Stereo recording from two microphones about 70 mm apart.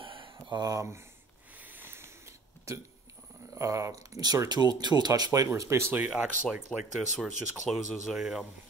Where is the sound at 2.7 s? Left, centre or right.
Right.